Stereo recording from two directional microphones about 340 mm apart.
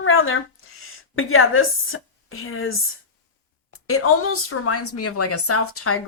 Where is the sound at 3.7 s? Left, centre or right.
Left.